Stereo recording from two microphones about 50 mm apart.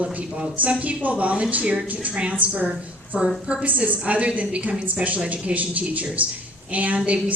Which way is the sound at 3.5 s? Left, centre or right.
Right.